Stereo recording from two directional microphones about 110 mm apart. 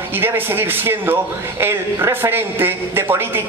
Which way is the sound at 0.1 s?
20° right (ahead or behind).